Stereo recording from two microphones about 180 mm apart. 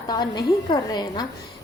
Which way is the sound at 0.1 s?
25° left (ahead or behind).